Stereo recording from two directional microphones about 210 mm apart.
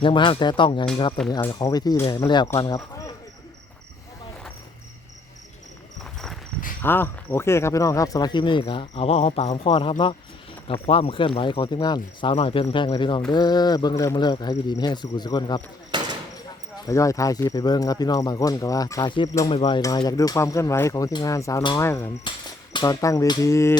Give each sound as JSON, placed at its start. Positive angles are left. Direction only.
{"t": 0.0, "sound": "speech", "side_deg": 25}
{"t": 6.8, "sound": "speech", "side_deg": 10}
{"t": 15.9, "sound": "a sound", "side_deg": -20}
{"t": 16.8, "sound": "speech", "side_deg": 15}